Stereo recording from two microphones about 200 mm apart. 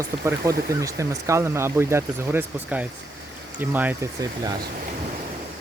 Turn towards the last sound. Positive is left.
turn(degrees=-10)  # may be behind; listen again after turning